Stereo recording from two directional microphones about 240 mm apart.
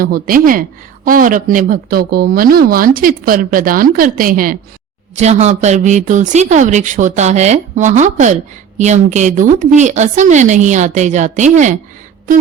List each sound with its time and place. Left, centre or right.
0.0 s a woman's voice: right